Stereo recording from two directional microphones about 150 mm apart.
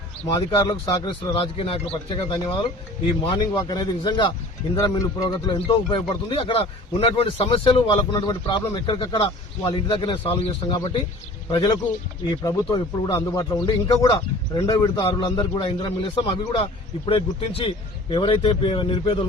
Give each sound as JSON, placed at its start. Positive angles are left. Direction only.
{"t": 0.3, "sound": "speech", "side_deg": 25}
{"t": 1.3, "sound": "speech", "side_deg": 35}